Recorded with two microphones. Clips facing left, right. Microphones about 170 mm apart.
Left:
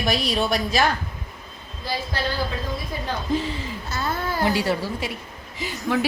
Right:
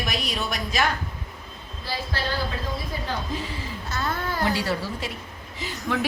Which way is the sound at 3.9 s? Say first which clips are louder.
Left 2 dB; 10° left (ahead or behind).